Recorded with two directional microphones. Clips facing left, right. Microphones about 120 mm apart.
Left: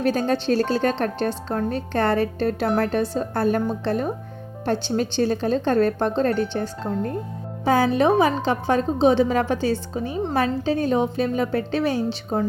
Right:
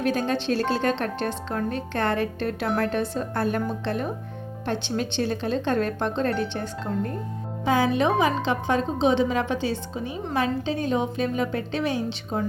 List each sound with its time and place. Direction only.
0.0 s a woman's voice: 35° left (ahead or behind)